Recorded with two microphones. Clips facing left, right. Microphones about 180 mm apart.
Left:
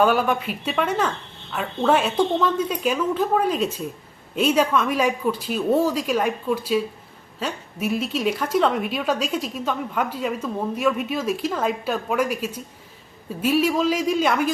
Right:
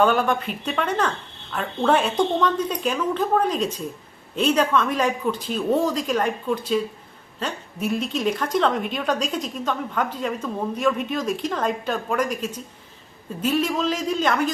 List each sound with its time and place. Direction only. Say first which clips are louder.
0.0 s a woman's voice: even; 5° left (ahead or behind)